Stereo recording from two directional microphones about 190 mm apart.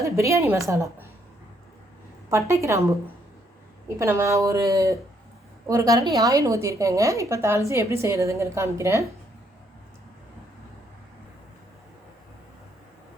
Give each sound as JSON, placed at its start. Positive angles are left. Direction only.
{"t": 0.0, "sound": "a woman's voice", "side_deg": -15}
{"t": 2.3, "sound": "a woman's voice", "side_deg": -15}